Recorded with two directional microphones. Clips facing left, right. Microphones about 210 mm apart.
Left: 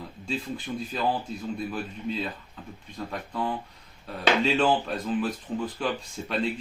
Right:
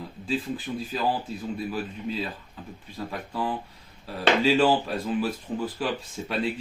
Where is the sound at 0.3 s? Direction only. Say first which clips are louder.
Right 3 dB; 5° right (ahead or behind).